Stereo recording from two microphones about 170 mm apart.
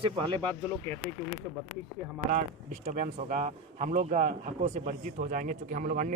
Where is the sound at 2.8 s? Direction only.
45° right (ahead or behind).